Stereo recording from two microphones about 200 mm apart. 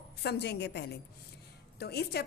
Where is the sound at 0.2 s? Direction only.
55° left (ahead or behind).